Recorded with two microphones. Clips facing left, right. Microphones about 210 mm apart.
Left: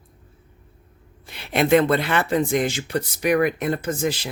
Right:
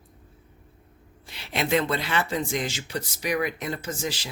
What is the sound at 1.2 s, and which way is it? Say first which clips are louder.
Speech: left 7 dB; 55° left (ahead or behind).